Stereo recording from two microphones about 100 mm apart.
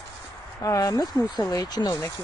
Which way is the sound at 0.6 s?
35° left (ahead or behind).